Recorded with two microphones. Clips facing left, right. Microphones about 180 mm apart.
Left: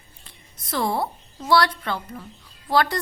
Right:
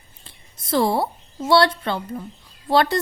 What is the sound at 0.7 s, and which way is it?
A woman's voice, 30° right (ahead or behind).